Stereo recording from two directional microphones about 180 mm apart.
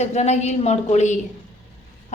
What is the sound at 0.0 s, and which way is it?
A woman's voice, 40° left (ahead or behind).